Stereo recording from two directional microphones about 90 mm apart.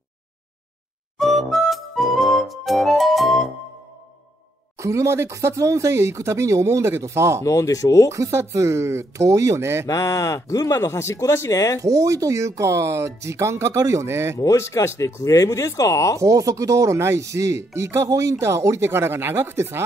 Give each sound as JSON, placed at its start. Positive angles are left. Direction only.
{"t": 1.1, "sound": "music", "side_deg": 0}
{"t": 4.7, "sound": "speech", "side_deg": -35}
{"t": 7.4, "sound": "speech", "side_deg": 35}
{"t": 8.1, "sound": "speech", "side_deg": -35}
{"t": 9.8, "sound": "speech", "side_deg": 35}
{"t": 11.8, "sound": "speech", "side_deg": -35}
{"t": 14.4, "sound": "speech", "side_deg": 35}
{"t": 16.2, "sound": "speech", "side_deg": -35}